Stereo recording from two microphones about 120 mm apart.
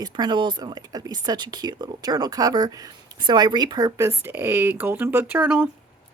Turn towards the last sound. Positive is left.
turn(degrees=-10)  # may be behind; listen again after turning